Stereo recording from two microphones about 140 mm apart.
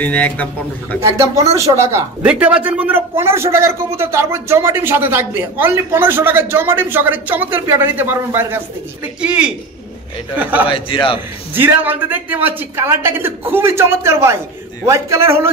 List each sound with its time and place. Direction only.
0.0 s a man's voice: 10° left (ahead or behind)
1.6 s a man's voice: 20° right (ahead or behind)
2.2 s a man's voice: 10° right (ahead or behind)
10.7 s a man's voice: 35° left (ahead or behind)
11.5 s a man's voice: 15° right (ahead or behind)